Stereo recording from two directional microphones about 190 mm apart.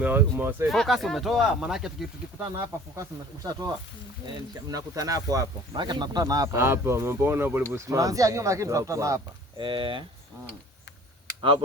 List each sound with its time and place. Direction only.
0.0 s speech: 10° right (ahead or behind)
0.7 s speech: centre (ahead or behind)
2.4 s speech: 15° right (ahead or behind)